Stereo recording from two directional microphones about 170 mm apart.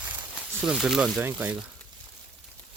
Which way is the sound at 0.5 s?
5° right (ahead or behind).